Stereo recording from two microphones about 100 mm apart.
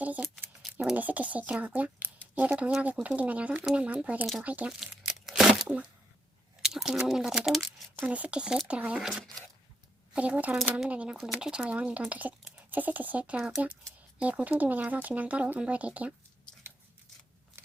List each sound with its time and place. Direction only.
0.0 s a sound: 15° right (ahead or behind)
0.6 s a sound: 5° right (ahead or behind)
0.9 s speech: 15° right (ahead or behind)
4.8 s crumpling: 5° right (ahead or behind)
5.6 s speech: 15° right (ahead or behind)
8.0 s speech: 15° right (ahead or behind)
10.2 s speech: 15° right (ahead or behind)